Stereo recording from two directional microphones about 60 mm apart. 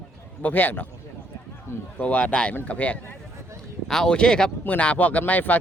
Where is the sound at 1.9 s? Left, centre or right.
Left.